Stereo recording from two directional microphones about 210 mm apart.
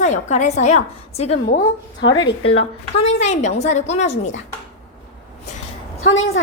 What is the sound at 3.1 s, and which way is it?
Speech, 30° left (ahead or behind).